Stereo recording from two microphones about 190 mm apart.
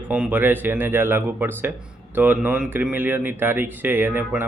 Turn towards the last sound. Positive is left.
turn(degrees=-10)  # may be behind; listen again after turning